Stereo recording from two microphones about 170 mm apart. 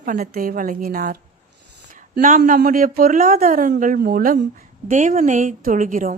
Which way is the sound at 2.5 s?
55° right (ahead or behind).